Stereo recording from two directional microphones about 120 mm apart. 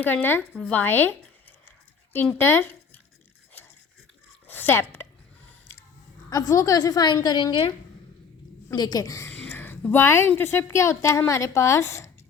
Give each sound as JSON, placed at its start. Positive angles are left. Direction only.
{"t": 0.0, "sound": "speech", "side_deg": 15}
{"t": 0.6, "sound": "a sound", "side_deg": 15}
{"t": 2.4, "sound": "speech", "side_deg": 15}
{"t": 4.4, "sound": "a sound", "side_deg": 15}
{"t": 6.3, "sound": "a woman's voice", "side_deg": 30}
{"t": 8.7, "sound": "a woman's voice", "side_deg": 35}
{"t": 9.3, "sound": "a woman's voice", "side_deg": 15}